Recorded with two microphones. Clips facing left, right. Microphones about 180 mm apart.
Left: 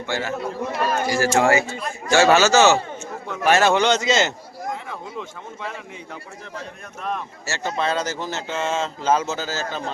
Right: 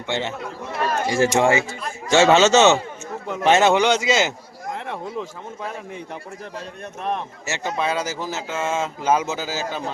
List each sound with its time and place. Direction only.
0.1 s a man's voice: 25° right (ahead or behind)
7.0 s speech: 20° right (ahead or behind)